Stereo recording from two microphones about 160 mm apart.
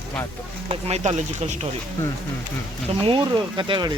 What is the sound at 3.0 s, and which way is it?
Speech, 30° right (ahead or behind).